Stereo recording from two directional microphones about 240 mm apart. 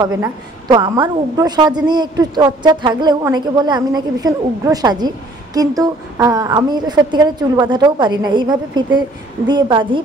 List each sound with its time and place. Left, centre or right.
0.0 s a woman's voice: centre